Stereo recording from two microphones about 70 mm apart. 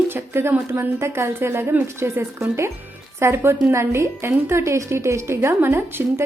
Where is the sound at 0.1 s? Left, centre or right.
Right.